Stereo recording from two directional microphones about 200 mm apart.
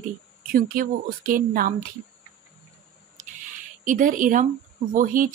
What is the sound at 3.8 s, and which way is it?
A woman's voice, 40° right (ahead or behind).